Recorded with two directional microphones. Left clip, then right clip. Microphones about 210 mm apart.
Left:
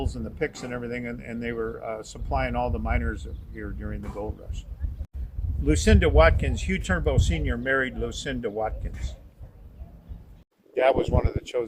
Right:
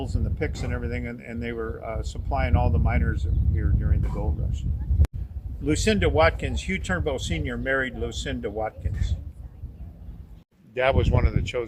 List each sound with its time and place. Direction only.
0.0 s speech: centre (ahead or behind)
5.6 s speech: 5° right (ahead or behind)
10.8 s speech: 40° left (ahead or behind)